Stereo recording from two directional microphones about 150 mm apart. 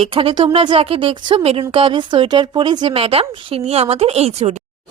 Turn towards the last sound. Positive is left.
turn(degrees=-45)  # may be behind; listen again after turning